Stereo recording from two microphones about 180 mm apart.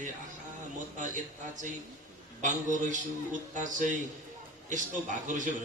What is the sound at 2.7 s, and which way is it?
A man's voice, 45° right (ahead or behind).